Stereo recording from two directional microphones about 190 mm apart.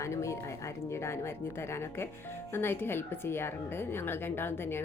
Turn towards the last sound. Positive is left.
turn(degrees=10)  # may be behind; listen again after turning